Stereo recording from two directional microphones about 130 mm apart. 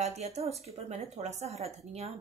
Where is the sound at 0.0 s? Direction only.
60° right (ahead or behind).